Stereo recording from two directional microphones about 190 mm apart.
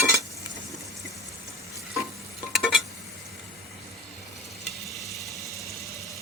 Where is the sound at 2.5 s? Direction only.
Centre (ahead or behind).